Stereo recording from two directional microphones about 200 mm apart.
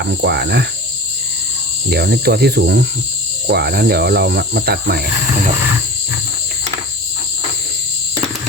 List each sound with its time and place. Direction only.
0.0 s cricket: 55° right (ahead or behind)
1.9 s cricket: 55° right (ahead or behind)